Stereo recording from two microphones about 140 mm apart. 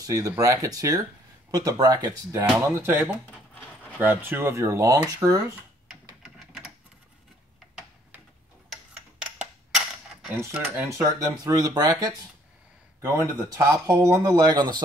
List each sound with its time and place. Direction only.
0.0 s speech: 25° right (ahead or behind)
2.5 s speech: 15° right (ahead or behind)
6.2 s typewriter: 5° right (ahead or behind)
10.4 s speech: 20° right (ahead or behind)